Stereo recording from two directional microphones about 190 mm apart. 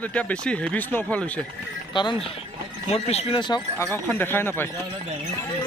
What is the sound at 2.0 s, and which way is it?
Speech, 25° left (ahead or behind).